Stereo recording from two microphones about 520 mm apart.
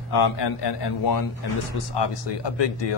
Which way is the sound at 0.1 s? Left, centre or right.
Left.